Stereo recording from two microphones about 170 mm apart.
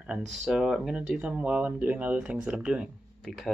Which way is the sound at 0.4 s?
5° right (ahead or behind).